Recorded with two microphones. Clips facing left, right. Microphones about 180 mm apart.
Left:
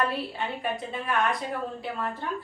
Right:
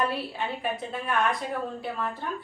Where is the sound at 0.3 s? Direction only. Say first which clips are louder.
Even; centre (ahead or behind).